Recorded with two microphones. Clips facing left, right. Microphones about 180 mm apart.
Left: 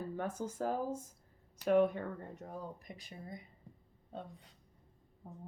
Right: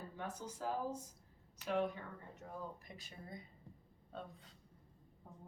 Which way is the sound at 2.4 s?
40° left (ahead or behind).